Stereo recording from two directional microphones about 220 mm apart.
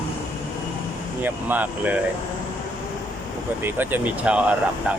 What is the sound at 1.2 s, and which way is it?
Speech, 5° right (ahead or behind).